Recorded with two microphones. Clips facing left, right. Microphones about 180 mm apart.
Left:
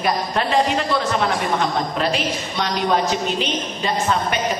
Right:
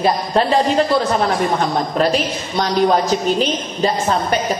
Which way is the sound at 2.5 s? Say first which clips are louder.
Right 6 dB; 40° right (ahead or behind).